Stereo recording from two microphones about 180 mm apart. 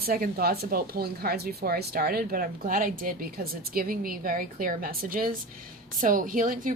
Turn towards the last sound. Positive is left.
turn(degrees=-50)  # may be behind; listen again after turning